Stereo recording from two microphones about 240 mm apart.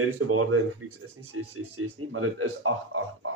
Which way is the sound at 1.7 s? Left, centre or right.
Right.